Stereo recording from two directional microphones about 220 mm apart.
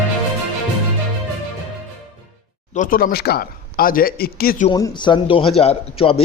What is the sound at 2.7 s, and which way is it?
Speech, 40° left (ahead or behind).